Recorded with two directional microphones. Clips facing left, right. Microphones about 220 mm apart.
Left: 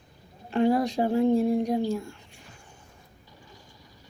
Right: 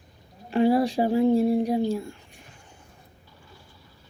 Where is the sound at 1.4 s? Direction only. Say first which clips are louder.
Right 2 dB; 35° right (ahead or behind).